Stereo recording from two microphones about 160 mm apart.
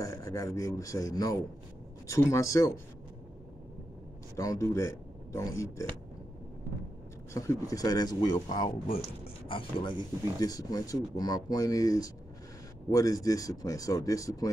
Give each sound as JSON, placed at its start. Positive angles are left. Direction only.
{"t": 0.0, "sound": "speech", "side_deg": 20}
{"t": 4.4, "sound": "speech", "side_deg": 20}
{"t": 7.3, "sound": "speech", "side_deg": 20}
{"t": 8.8, "sound": "speech", "side_deg": 65}
{"t": 9.5, "sound": "speech", "side_deg": 35}